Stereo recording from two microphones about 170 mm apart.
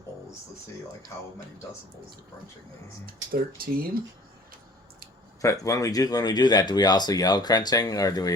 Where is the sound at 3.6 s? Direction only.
60° right (ahead or behind).